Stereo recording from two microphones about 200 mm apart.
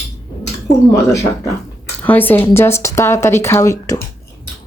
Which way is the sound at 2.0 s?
10° left (ahead or behind).